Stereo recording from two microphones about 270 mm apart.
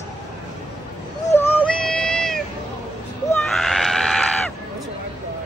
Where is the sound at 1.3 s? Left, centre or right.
Centre.